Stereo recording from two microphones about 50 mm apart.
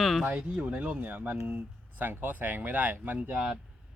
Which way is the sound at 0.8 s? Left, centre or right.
Right.